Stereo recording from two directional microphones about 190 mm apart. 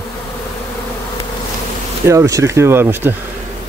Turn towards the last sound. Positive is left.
turn(degrees=-10)  # may be behind; listen again after turning